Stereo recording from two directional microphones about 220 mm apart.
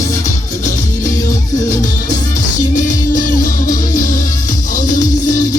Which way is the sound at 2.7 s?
35° left (ahead or behind).